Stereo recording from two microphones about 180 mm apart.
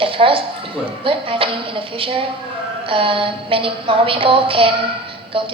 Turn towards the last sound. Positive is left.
turn(degrees=-30)  # may be behind; listen again after turning